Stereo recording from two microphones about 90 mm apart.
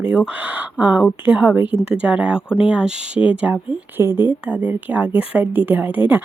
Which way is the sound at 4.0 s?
25° right (ahead or behind).